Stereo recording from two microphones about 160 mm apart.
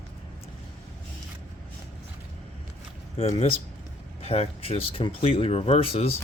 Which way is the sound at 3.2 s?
35° left (ahead or behind).